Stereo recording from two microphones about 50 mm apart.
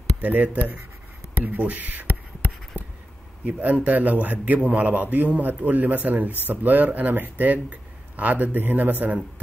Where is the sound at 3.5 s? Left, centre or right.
Right.